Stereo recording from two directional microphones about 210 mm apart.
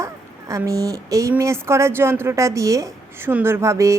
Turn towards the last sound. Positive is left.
turn(degrees=-15)  # may be behind; listen again after turning